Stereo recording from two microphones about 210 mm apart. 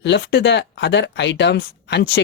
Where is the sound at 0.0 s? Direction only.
55° left (ahead or behind).